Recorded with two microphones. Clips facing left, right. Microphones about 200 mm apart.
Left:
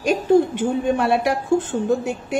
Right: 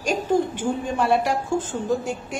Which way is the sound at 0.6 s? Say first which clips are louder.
Left 4 dB; 65° left (ahead or behind).